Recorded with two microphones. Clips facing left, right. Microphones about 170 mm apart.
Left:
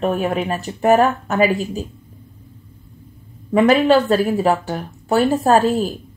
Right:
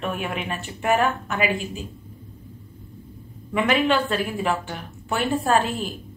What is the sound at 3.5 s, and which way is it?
Speech, 40° left (ahead or behind).